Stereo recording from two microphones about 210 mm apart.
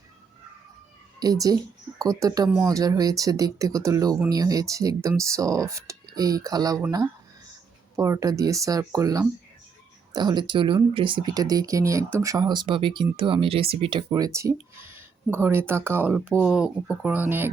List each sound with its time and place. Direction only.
1.2 s speech: 15° right (ahead or behind)
7.9 s speech: 15° right (ahead or behind)